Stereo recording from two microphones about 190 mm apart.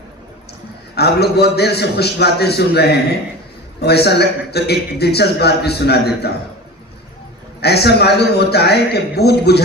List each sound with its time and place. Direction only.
0.9 s a man's voice: 60° left (ahead or behind)
7.6 s a man's voice: 60° left (ahead or behind)